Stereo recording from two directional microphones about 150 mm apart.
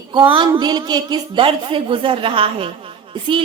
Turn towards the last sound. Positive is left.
turn(degrees=-35)  # may be behind; listen again after turning